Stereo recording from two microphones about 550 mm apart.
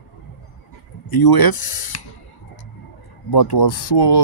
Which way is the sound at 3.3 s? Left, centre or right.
Left.